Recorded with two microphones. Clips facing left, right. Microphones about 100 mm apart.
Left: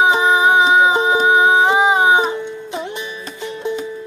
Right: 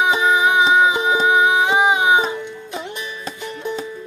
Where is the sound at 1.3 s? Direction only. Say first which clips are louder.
Left 4 dB; 35° left (ahead or behind).